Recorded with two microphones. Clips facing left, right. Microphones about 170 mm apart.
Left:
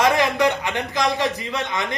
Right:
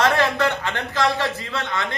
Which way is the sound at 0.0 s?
15° left (ahead or behind).